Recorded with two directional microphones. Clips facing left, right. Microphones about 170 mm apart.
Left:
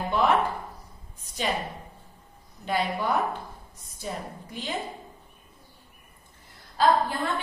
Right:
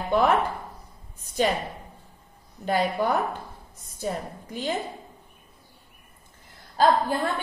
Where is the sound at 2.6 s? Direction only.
45° right (ahead or behind).